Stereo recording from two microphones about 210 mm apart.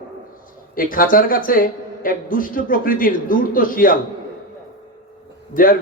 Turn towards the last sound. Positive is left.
turn(degrees=40)  # may be behind; listen again after turning